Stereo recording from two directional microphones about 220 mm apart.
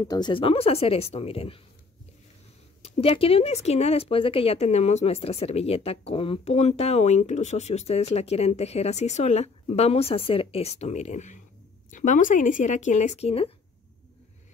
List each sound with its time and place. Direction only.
0.0 s speech: 15° left (ahead or behind)
2.8 s speech: 25° left (ahead or behind)